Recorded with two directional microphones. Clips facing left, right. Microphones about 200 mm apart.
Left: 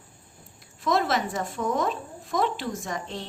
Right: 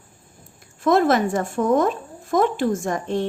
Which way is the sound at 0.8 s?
50° right (ahead or behind).